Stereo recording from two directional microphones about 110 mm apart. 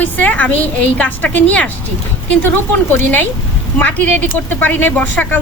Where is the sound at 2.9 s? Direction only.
15° left (ahead or behind).